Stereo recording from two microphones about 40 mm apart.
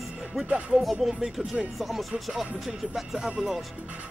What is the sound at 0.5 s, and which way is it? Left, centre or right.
Speech, right.